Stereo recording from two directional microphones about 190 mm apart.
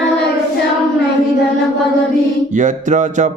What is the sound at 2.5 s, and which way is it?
Music, 40° right (ahead or behind).